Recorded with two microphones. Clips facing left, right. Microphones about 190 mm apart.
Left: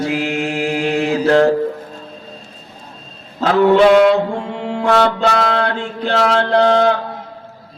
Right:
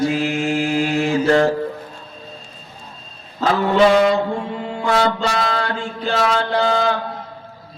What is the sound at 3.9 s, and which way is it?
Music, 65° left (ahead or behind).